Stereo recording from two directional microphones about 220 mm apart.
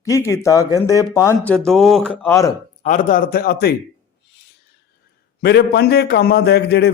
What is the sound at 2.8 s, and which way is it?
Speech, 35° left (ahead or behind).